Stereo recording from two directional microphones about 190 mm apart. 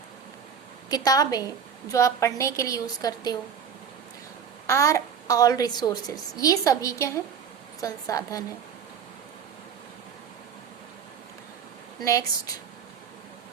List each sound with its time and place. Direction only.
0.9 s a woman's voice: 20° left (ahead or behind)
4.6 s a woman's voice: 15° left (ahead or behind)
11.9 s speech: 15° left (ahead or behind)